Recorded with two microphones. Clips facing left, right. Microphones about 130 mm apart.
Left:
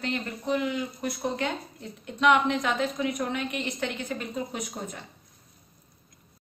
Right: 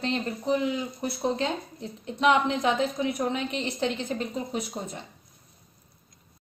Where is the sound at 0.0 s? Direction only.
25° right (ahead or behind).